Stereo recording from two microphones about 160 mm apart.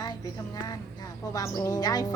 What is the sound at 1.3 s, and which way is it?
Speech, 20° left (ahead or behind).